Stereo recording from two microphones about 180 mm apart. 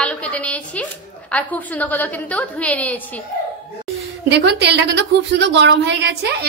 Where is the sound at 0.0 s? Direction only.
5° left (ahead or behind).